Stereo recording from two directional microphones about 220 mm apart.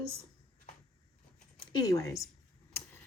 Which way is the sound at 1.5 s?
15° left (ahead or behind).